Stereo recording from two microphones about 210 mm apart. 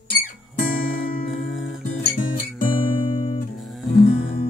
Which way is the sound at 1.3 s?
Centre (ahead or behind).